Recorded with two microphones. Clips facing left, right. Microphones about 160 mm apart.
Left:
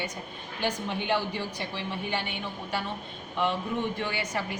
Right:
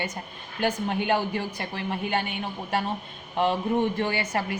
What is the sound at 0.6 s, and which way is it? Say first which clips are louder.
A woman's voice: right 5 dB; 50° right (ahead or behind).